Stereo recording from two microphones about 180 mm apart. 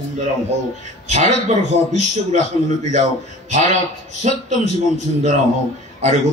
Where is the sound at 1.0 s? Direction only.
40° right (ahead or behind).